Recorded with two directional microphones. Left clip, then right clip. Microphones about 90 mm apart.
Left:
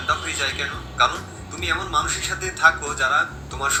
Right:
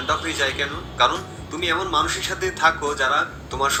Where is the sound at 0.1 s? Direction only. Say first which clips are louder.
Right 1 dB; 40° right (ahead or behind).